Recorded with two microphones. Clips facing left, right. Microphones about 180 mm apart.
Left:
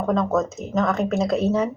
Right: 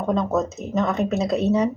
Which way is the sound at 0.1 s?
Centre (ahead or behind).